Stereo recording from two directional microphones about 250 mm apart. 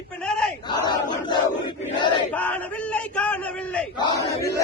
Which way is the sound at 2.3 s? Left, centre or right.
Centre.